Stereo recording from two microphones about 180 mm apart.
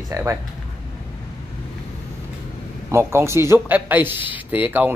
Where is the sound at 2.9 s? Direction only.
15° right (ahead or behind).